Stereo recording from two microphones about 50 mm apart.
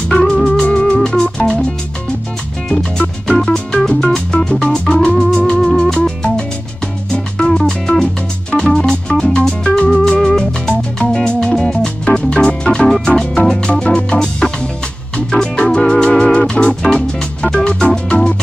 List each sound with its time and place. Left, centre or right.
0.5 s music: left
2.7 s music: centre